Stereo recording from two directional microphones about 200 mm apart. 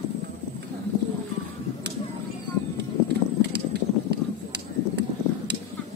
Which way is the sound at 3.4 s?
55° right (ahead or behind).